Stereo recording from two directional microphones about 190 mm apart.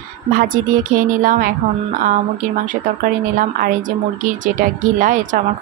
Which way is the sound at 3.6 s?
40° right (ahead or behind).